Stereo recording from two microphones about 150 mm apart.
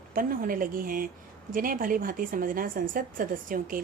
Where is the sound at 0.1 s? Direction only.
70° right (ahead or behind).